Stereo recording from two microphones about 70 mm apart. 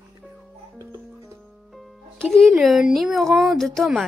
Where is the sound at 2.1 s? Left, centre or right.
Centre.